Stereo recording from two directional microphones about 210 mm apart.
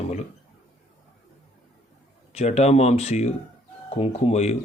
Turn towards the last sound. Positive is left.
turn(degrees=30)  # may be behind; listen again after turning